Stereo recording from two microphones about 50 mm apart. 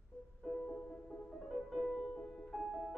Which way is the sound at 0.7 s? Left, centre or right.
Left.